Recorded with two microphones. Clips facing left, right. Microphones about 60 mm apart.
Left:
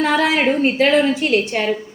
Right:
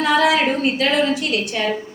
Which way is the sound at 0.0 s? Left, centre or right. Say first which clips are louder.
Right 1 dB; left.